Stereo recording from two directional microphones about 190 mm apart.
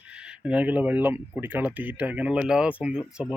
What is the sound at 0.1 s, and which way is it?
Speech, 5° right (ahead or behind).